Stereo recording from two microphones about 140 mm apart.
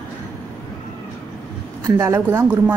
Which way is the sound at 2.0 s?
15° right (ahead or behind).